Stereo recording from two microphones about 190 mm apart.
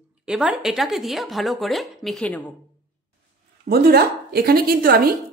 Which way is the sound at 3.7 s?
55° right (ahead or behind).